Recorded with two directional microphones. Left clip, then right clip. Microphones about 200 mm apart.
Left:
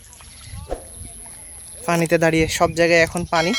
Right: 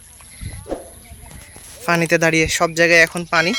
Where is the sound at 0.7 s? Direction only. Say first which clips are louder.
Right 3 dB; centre (ahead or behind).